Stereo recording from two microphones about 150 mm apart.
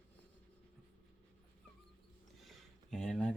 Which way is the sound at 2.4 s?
5° left (ahead or behind).